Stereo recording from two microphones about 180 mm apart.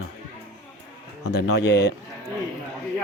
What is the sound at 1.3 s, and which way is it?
Speech, 65° left (ahead or behind).